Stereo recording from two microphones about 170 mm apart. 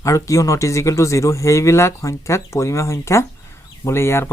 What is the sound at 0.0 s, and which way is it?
Speech, 20° left (ahead or behind).